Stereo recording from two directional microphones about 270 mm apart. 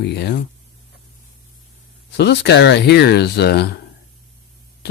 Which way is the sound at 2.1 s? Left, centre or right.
Left.